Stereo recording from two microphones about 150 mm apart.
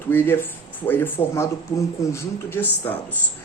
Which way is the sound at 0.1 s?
15° left (ahead or behind).